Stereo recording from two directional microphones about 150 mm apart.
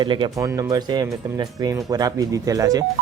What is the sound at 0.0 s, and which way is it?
Speech, 30° right (ahead or behind).